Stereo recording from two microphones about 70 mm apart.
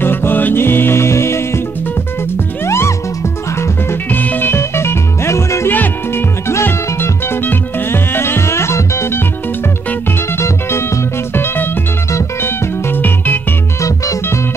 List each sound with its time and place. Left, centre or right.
0.0 s music: left
2.6 s music: left
4.1 s music: left
5.7 s music: left
10.3 s music: left
13.7 s music: left